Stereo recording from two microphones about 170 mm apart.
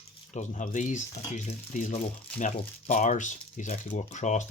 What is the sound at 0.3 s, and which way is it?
Speech, 50° left (ahead or behind).